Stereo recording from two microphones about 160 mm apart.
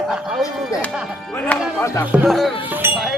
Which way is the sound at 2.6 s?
10° right (ahead or behind).